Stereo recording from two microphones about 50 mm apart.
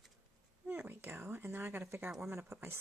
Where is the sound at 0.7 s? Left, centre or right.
Right.